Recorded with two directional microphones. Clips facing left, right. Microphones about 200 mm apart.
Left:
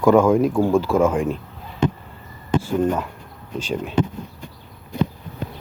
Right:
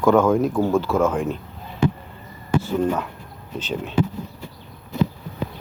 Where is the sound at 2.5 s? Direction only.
20° left (ahead or behind).